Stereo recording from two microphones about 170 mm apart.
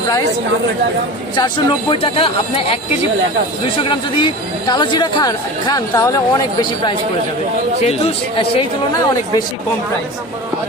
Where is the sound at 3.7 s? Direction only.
30° left (ahead or behind).